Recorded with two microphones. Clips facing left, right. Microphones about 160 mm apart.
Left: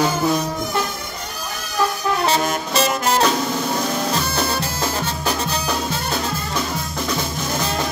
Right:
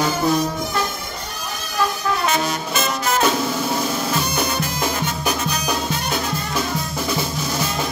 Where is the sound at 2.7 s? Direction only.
35° left (ahead or behind).